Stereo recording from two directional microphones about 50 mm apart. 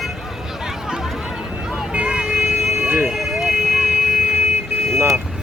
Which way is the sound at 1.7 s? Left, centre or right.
Centre.